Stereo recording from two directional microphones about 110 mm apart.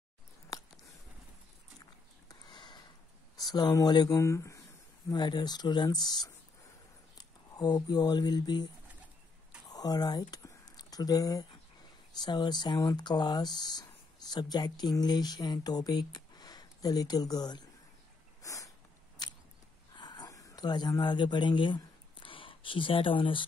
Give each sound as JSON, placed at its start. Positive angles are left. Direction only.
{"t": 2.2, "sound": "sniff", "side_deg": 40}
{"t": 3.3, "sound": "speech", "side_deg": 35}
{"t": 4.2, "sound": "speech", "side_deg": 30}
{"t": 5.1, "sound": "speech", "side_deg": 40}
{"t": 9.7, "sound": "a sound", "side_deg": 35}
{"t": 12.2, "sound": "speech", "side_deg": 40}
{"t": 18.4, "sound": "a sound", "side_deg": 30}